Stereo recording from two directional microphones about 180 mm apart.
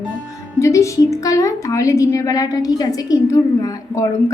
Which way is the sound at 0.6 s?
15° left (ahead or behind).